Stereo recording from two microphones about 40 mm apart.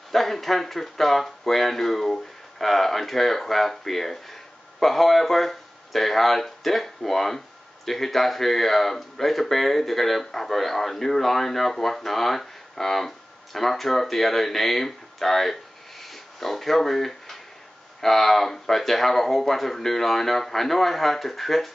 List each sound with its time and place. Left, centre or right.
0.1 s speech: centre